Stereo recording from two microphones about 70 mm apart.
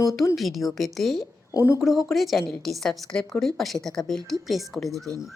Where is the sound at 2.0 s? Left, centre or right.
Centre.